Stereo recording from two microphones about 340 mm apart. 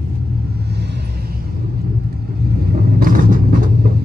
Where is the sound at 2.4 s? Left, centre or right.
Right.